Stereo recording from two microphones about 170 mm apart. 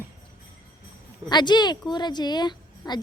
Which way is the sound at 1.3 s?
25° left (ahead or behind).